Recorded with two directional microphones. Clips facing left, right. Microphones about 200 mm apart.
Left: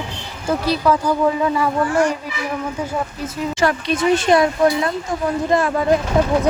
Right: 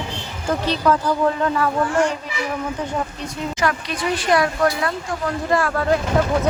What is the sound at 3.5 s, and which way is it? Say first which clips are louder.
Speech: left 5 dB; 30° left (ahead or behind).